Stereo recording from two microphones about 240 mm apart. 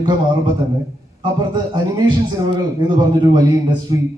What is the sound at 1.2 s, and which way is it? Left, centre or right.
Speech, centre.